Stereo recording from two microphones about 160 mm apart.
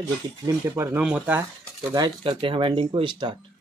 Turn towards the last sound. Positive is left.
turn(degrees=-25)  # may be behind; listen again after turning